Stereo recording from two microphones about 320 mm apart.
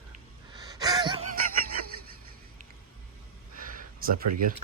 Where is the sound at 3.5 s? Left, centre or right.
Right.